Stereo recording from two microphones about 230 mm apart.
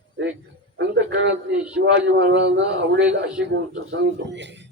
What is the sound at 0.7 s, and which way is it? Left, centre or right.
A man's voice, right.